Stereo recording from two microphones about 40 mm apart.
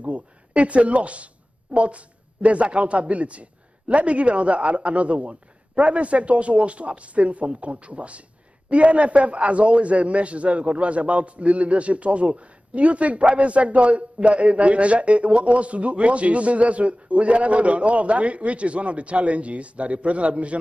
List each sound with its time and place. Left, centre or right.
0.0 s speech: right